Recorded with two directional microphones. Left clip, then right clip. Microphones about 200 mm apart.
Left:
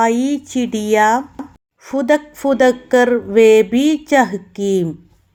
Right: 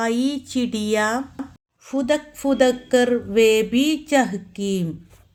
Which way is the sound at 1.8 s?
20° left (ahead or behind).